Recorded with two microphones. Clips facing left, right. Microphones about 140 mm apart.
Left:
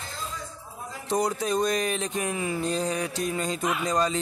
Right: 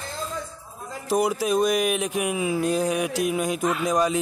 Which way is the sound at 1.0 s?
5° right (ahead or behind).